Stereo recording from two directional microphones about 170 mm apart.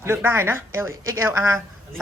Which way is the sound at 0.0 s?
15° right (ahead or behind).